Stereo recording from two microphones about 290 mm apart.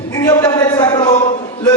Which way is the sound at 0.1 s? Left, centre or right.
Centre.